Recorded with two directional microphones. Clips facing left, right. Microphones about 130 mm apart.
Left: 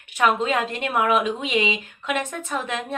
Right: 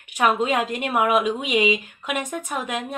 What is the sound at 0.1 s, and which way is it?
Speech, 15° right (ahead or behind).